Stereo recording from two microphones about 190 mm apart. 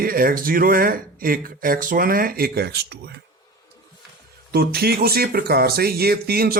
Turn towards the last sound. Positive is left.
turn(degrees=-55)  # may be behind; listen again after turning